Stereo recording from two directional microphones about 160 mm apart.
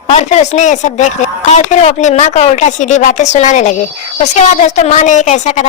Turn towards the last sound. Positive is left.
turn(degrees=50)  # may be behind; listen again after turning